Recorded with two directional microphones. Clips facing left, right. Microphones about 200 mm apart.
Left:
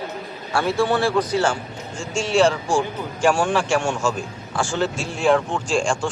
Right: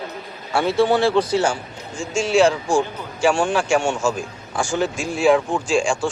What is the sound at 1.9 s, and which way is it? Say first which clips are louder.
A man's voice: right 2 dB; 10° right (ahead or behind).